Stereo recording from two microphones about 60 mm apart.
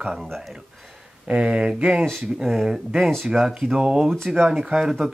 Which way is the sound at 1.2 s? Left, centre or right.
Centre.